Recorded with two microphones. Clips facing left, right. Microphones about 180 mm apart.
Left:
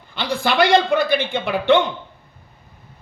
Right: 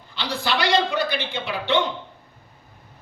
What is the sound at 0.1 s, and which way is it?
A man's voice, 55° left (ahead or behind).